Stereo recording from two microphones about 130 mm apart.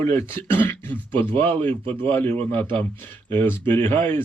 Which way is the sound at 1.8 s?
45° right (ahead or behind).